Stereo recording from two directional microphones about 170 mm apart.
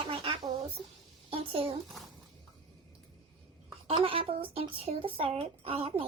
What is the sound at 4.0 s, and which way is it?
Speech, 30° right (ahead or behind).